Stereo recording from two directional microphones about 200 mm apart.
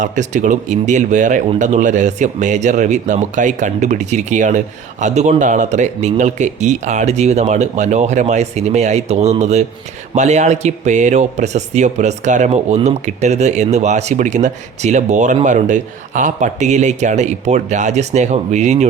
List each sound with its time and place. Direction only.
0.0 s speech: 40° right (ahead or behind)